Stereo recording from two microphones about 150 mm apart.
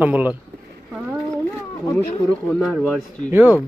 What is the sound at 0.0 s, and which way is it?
Speech, 10° right (ahead or behind).